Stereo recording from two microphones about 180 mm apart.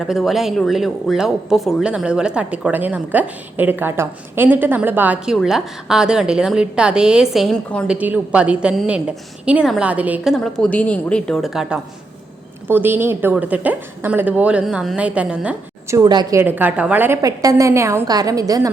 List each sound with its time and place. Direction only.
0.0 s speech: centre (ahead or behind)
7.9 s speech: 10° right (ahead or behind)
12.6 s a woman's voice: 10° right (ahead or behind)
16.0 s a woman's voice: 25° right (ahead or behind)
16.4 s a woman's voice: 10° right (ahead or behind)